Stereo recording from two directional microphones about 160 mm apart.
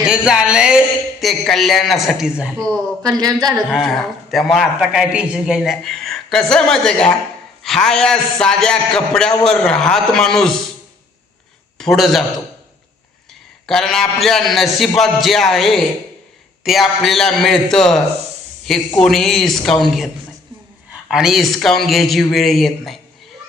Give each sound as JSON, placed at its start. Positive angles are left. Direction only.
{"t": 0.0, "sound": "a man's voice", "side_deg": -5}
{"t": 3.0, "sound": "speech", "side_deg": -25}
{"t": 3.5, "sound": "a man's voice", "side_deg": -5}
{"t": 11.8, "sound": "a man's voice", "side_deg": 0}
{"t": 13.7, "sound": "a man's voice", "side_deg": 0}
{"t": 21.1, "sound": "a man's voice", "side_deg": -5}